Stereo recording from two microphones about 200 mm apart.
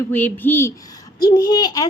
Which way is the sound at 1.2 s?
20° left (ahead or behind).